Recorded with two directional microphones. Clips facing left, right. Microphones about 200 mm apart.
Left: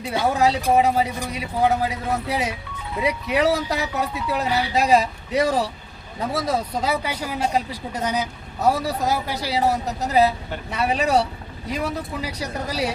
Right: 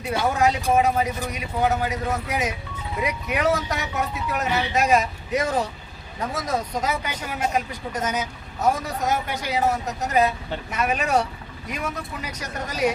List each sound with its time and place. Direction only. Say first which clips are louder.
0.0 s speech: left 1 dB; 30° left (ahead or behind)